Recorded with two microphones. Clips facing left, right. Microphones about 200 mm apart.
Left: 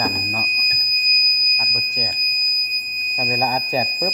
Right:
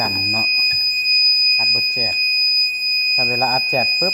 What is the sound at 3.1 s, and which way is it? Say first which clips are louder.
Speech: right 1 dB; 5° left (ahead or behind).